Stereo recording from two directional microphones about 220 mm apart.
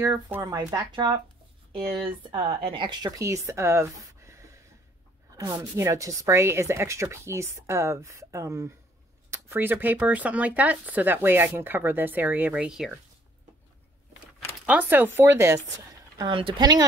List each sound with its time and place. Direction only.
0.0 s speech: 15° right (ahead or behind)
2.6 s speech: 25° right (ahead or behind); by 13.0 s 5° right (ahead or behind)
14.7 s speech: 10° right (ahead or behind)
16.2 s speech: 20° right (ahead or behind)